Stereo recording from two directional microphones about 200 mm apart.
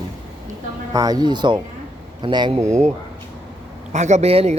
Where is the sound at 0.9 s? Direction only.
20° right (ahead or behind).